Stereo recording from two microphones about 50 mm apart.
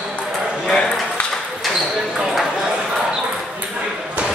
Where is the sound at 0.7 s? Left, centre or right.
Centre.